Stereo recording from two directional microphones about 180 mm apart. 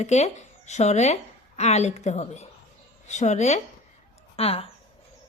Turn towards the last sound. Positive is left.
turn(degrees=30)  # may be behind; listen again after turning